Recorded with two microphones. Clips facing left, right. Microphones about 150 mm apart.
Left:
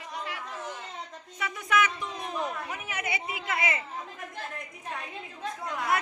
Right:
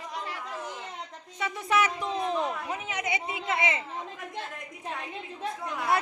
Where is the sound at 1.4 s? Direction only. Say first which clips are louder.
Right 1 dB; 30° right (ahead or behind).